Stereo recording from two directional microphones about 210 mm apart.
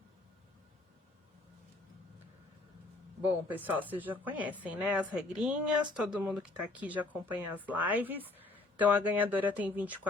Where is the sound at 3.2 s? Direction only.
10° right (ahead or behind).